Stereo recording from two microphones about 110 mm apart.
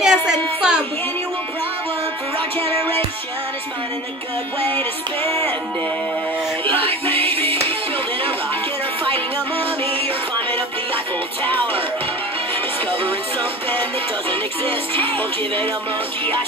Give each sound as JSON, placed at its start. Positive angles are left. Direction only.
{"t": 0.0, "sound": "a sound", "side_deg": -5}
{"t": 6.8, "sound": "music", "side_deg": -55}
{"t": 15.1, "sound": "music", "side_deg": 20}